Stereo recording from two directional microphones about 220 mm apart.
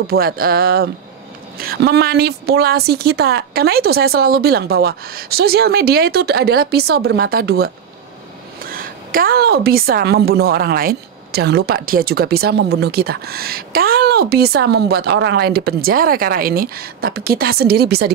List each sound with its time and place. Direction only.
0.0 s a woman's voice: 45° right (ahead or behind)